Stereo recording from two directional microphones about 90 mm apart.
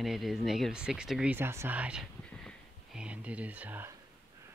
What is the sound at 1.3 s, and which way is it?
Speech, 30° right (ahead or behind).